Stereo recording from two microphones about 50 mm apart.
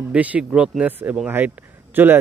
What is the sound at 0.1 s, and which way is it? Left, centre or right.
Speech, right.